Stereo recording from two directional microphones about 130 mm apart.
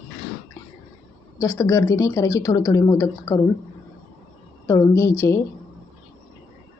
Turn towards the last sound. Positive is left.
turn(degrees=20)  # may be behind; listen again after turning